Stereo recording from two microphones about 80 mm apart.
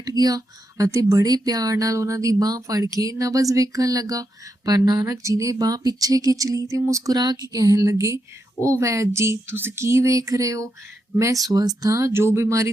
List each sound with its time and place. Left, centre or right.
0.0 s speech: right
7.2 s speech: right